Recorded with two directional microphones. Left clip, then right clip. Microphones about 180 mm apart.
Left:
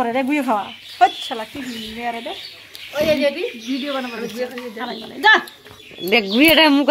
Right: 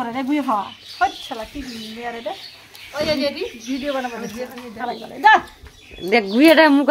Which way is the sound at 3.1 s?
90° right.